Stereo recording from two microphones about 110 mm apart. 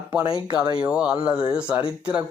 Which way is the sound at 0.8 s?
10° right (ahead or behind).